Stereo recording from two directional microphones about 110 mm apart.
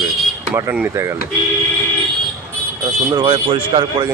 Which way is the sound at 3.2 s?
50° right (ahead or behind).